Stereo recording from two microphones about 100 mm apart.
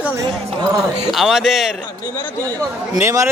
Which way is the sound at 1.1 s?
Centre (ahead or behind).